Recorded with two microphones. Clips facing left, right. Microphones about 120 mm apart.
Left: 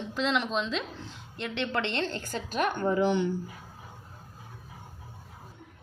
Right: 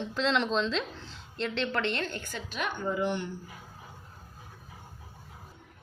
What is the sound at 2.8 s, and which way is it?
Speech, 85° left.